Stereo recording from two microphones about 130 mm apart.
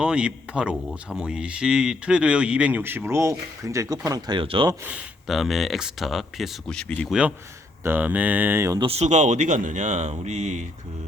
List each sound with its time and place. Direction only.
0.0 s speech: 10° right (ahead or behind); by 4.4 s 30° right (ahead or behind)
4.4 s speech: 40° right (ahead or behind)
4.9 s speech: 5° right (ahead or behind)
7.1 s speech: 10° right (ahead or behind)
8.8 s speech: 55° right (ahead or behind)